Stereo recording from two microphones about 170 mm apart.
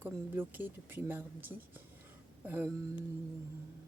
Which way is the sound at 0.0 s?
10° right (ahead or behind).